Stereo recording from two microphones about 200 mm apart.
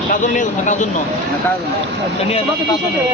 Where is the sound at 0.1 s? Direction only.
40° left (ahead or behind).